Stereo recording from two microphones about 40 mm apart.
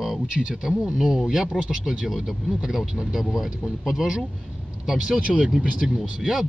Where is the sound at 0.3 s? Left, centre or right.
Right.